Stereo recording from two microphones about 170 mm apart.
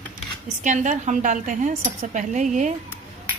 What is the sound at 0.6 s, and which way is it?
Speech, 50° right (ahead or behind).